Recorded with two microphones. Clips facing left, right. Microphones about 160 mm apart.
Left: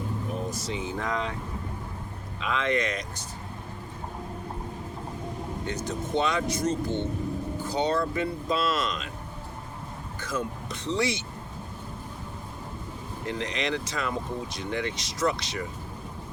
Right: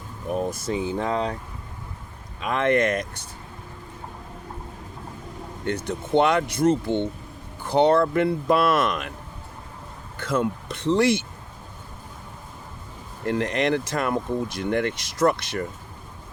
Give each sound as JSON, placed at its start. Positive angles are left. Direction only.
{"t": 0.3, "sound": "speech", "side_deg": -55}
{"t": 0.8, "sound": "speech", "side_deg": -30}
{"t": 2.4, "sound": "speech", "side_deg": -55}
{"t": 5.6, "sound": "speech", "side_deg": -60}
{"t": 10.2, "sound": "speech", "side_deg": -60}
{"t": 13.2, "sound": "speech", "side_deg": -55}